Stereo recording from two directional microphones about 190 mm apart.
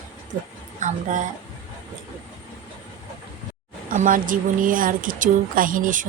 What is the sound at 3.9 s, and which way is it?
Speech, 45° right (ahead or behind).